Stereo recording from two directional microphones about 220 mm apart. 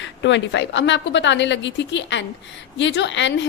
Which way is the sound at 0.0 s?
55° left (ahead or behind).